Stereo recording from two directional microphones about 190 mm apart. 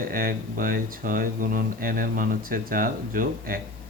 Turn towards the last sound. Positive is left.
turn(degrees=-50)  # may be behind; listen again after turning